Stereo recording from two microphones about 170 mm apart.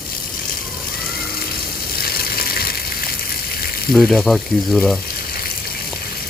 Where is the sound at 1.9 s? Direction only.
60° left (ahead or behind).